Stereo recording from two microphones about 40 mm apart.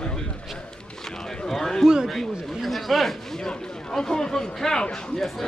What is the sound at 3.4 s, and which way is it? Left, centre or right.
A man's voice, centre.